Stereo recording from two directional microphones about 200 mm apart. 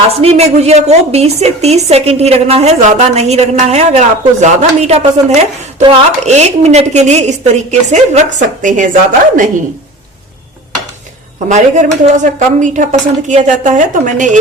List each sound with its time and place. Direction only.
0.2 s a woman's voice: 30° right (ahead or behind)
11.4 s a woman's voice: 35° right (ahead or behind)